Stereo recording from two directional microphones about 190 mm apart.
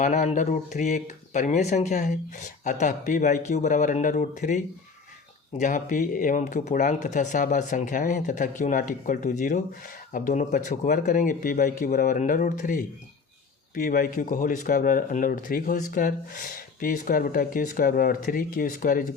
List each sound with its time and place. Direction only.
0.0 s speech: 40° left (ahead or behind)